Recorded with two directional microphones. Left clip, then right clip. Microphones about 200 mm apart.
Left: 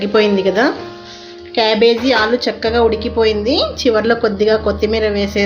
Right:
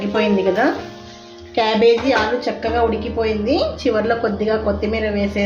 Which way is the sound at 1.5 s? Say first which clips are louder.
Left 2 dB; 30° left (ahead or behind).